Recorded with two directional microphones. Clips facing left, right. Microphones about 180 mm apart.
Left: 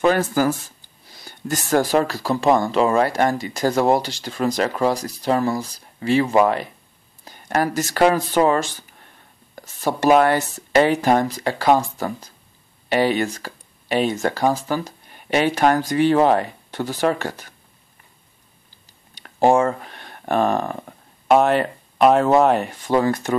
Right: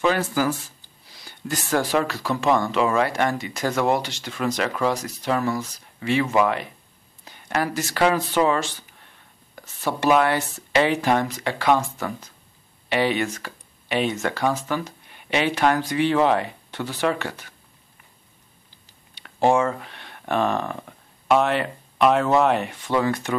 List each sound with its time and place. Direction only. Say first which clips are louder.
0.0 s speech: left 4 dB; 45° left (ahead or behind)
19.1 s a sound: left 3 dB; 45° left (ahead or behind)
21.3 s speech: left 4 dB; 45° left (ahead or behind)